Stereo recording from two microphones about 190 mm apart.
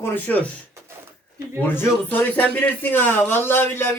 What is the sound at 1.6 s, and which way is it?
Speech, 10° left (ahead or behind).